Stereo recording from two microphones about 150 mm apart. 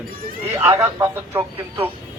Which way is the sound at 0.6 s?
15° right (ahead or behind).